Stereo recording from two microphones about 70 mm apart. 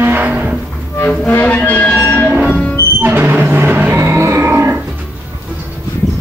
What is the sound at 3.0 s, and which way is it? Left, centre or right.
Music, right.